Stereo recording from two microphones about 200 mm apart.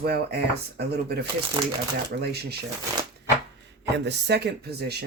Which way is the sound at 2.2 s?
55° right (ahead or behind).